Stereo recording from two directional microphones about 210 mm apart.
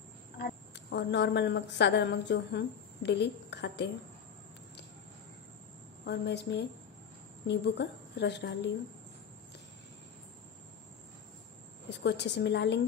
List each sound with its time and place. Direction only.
0.4 s speech: 50° left (ahead or behind)
6.0 s a woman's voice: 55° left (ahead or behind)
11.9 s a woman's voice: 55° left (ahead or behind)